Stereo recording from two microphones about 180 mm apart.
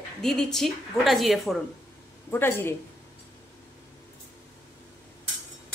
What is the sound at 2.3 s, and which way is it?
Speech, 10° left (ahead or behind).